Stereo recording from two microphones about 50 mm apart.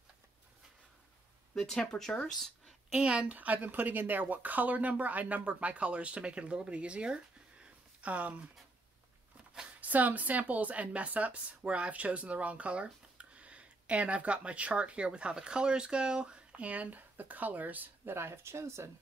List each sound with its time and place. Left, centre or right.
1.5 s speech: centre
2.9 s speech: centre
3.3 s speech: right
9.8 s speech: right
18.1 s speech: right